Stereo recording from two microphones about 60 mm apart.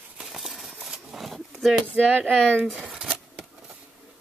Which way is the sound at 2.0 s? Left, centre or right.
Right.